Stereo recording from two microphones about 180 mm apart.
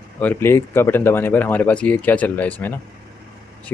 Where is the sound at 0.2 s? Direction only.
10° left (ahead or behind).